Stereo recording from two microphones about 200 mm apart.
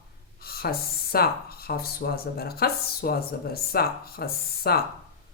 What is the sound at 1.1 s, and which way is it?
Speech, 50° left (ahead or behind).